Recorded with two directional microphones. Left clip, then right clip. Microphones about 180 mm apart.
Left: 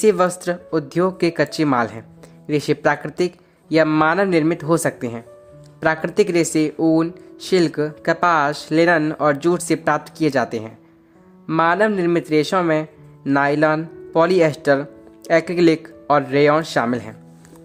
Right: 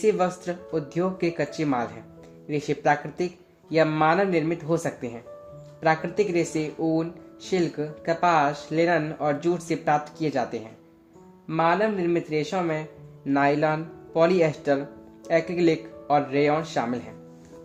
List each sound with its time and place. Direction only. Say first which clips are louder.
0.0 s speech: left 7 dB; 40° left (ahead or behind)